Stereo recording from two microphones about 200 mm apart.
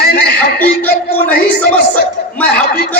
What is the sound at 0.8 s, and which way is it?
Speech, 10° left (ahead or behind).